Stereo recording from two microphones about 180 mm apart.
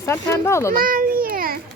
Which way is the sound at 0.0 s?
15° left (ahead or behind).